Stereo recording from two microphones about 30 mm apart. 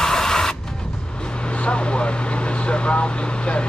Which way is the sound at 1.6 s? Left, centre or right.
Left.